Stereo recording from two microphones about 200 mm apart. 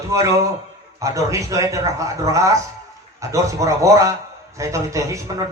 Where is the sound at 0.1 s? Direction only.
15° right (ahead or behind).